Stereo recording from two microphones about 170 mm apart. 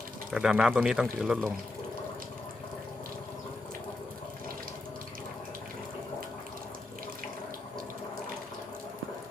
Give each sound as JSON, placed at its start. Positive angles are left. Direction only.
{"t": 0.3, "sound": "speech", "side_deg": -5}